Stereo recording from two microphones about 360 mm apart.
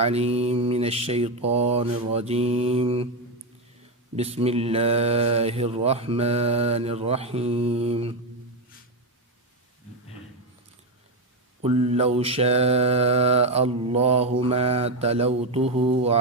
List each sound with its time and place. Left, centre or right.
0.0 s mantra: centre
4.1 s mantra: centre
11.6 s mantra: centre